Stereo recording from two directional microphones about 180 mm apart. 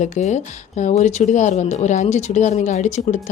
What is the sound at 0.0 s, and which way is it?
Speech, 40° left (ahead or behind).